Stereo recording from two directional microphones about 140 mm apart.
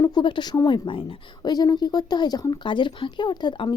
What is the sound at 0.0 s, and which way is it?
Speech, 30° left (ahead or behind).